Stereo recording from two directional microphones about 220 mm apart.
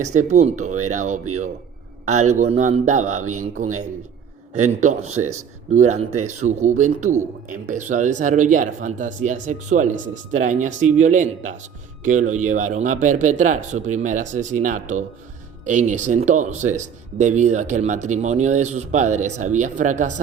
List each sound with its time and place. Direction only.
0.0 s speech: 35° right (ahead or behind)
2.4 s speech: 35° right (ahead or behind)
4.8 s speech: 30° right (ahead or behind)